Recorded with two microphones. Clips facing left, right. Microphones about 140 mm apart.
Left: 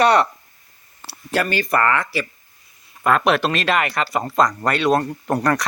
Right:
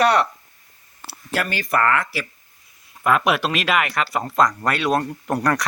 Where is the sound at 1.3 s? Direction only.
Centre (ahead or behind).